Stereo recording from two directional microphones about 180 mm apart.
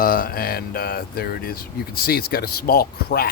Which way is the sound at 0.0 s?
50° left (ahead or behind).